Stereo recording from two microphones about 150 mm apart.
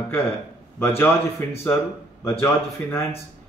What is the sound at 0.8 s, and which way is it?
A man's voice, 15° left (ahead or behind).